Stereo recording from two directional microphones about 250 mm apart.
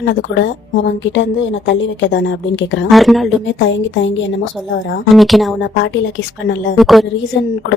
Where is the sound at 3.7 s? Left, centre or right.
Left.